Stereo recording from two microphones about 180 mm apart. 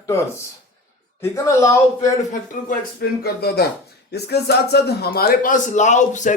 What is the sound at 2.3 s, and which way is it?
A man's voice, 50° left (ahead or behind).